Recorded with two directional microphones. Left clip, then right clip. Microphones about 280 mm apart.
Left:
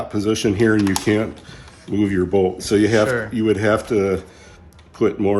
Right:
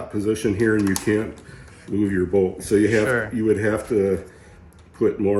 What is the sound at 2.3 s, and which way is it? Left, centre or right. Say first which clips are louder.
Speech: left 1 dB; centre.